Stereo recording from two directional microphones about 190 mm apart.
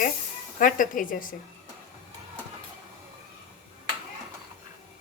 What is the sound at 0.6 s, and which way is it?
Speech, 45° left (ahead or behind).